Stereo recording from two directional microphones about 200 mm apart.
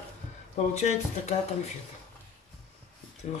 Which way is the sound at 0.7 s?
35° left (ahead or behind).